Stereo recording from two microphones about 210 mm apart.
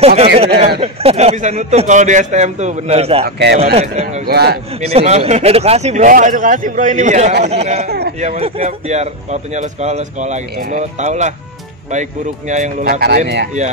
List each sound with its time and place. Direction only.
0.0 s a man's voice: 30° right (ahead or behind)
3.3 s speech: 55° right (ahead or behind)
3.7 s a man's voice: 30° right (ahead or behind)
4.3 s speech: 50° right (ahead or behind)
4.7 s a man's voice: 30° right (ahead or behind)